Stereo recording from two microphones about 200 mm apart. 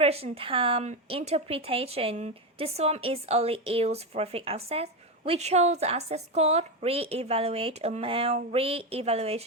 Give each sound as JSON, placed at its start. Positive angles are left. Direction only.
{"t": 0.0, "sound": "speech", "side_deg": -30}